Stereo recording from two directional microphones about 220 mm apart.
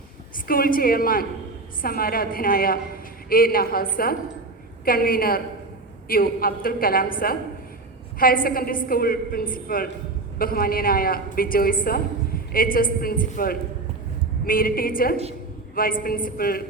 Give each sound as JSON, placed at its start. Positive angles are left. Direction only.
{"t": 0.4, "sound": "a woman's voice", "side_deg": 40}